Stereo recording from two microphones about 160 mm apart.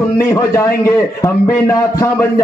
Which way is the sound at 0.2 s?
20° left (ahead or behind).